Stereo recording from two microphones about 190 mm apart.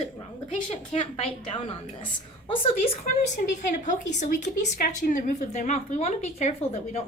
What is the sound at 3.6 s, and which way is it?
A woman's voice, 40° left (ahead or behind).